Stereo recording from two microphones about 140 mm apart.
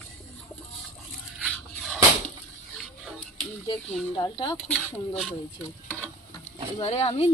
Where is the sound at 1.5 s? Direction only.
10° left (ahead or behind).